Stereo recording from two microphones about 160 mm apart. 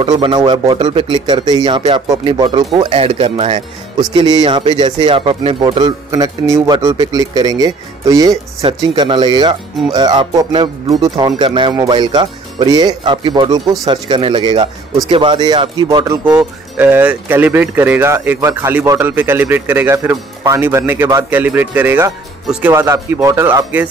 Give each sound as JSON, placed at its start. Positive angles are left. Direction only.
{"t": 0.0, "sound": "speech", "side_deg": -30}
{"t": 4.0, "sound": "speech", "side_deg": -25}
{"t": 16.3, "sound": "speech", "side_deg": -10}
{"t": 22.7, "sound": "speech", "side_deg": -20}